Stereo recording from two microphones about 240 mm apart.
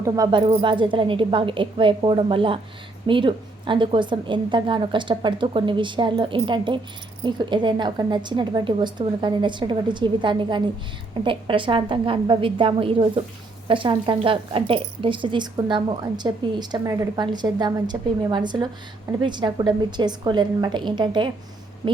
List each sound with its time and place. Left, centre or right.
0.0 s speech: centre